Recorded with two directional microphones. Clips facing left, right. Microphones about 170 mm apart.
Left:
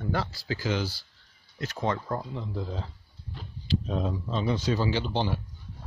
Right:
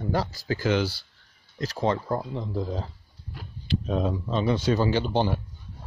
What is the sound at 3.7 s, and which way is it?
Speech, 70° right (ahead or behind).